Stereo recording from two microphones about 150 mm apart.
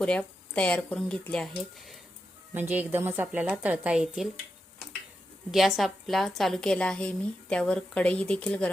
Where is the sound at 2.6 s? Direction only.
15° right (ahead or behind).